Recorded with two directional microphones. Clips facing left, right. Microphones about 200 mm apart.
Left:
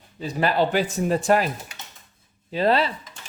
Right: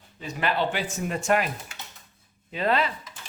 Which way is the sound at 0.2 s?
35° left (ahead or behind).